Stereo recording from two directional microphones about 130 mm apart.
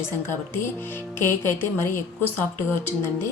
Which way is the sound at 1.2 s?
20° left (ahead or behind).